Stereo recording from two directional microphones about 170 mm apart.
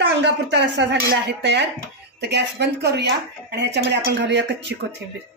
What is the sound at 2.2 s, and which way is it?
Speech, 80° right.